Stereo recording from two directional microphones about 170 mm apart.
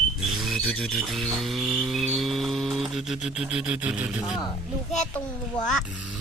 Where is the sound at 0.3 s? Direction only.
Centre (ahead or behind).